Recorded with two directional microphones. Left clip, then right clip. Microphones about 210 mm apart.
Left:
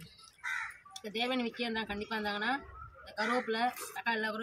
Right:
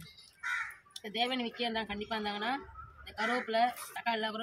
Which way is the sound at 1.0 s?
10° right (ahead or behind).